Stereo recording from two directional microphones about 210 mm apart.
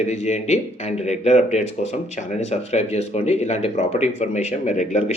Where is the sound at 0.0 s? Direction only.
35° left (ahead or behind).